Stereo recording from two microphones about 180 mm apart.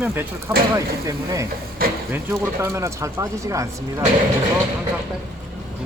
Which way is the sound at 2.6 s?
15° right (ahead or behind).